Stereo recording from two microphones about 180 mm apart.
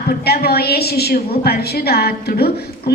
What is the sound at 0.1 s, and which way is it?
A woman's voice, 60° left (ahead or behind).